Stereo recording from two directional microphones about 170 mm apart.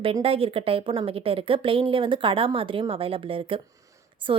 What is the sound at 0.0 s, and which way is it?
A woman's voice, 35° right (ahead or behind).